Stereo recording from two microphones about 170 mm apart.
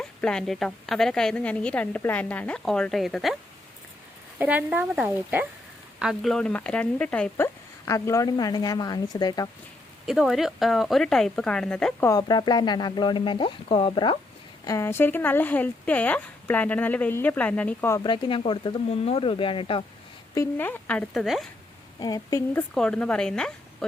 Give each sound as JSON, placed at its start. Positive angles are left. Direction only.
{"t": 0.0, "sound": "a woman's voice", "side_deg": 5}
{"t": 4.4, "sound": "speech", "side_deg": -10}
{"t": 10.1, "sound": "a woman's voice", "side_deg": 0}
{"t": 12.0, "sound": "speech", "side_deg": 25}
{"t": 14.7, "sound": "speech", "side_deg": 15}
{"t": 18.0, "sound": "speech", "side_deg": 25}
{"t": 20.3, "sound": "speech", "side_deg": 15}
{"t": 22.0, "sound": "speech", "side_deg": 20}
{"t": 22.7, "sound": "a woman's voice", "side_deg": 5}